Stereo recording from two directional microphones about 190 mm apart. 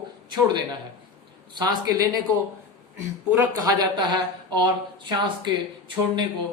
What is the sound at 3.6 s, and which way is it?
A woman's voice, 20° right (ahead or behind).